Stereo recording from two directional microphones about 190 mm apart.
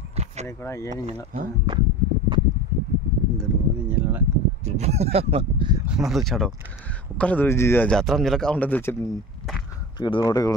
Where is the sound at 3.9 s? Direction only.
10° right (ahead or behind).